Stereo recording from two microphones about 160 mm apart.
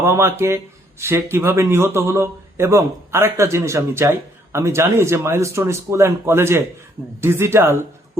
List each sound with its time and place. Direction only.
0.0 s a man's voice: 15° right (ahead or behind)